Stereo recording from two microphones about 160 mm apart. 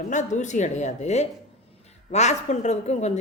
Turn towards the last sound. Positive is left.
turn(degrees=45)  # may be behind; listen again after turning